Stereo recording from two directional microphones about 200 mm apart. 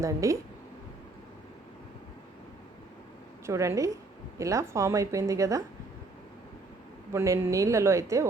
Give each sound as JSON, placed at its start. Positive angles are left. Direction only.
{"t": 0.0, "sound": "speech", "side_deg": -15}
{"t": 3.4, "sound": "speech", "side_deg": -15}
{"t": 7.1, "sound": "speech", "side_deg": -15}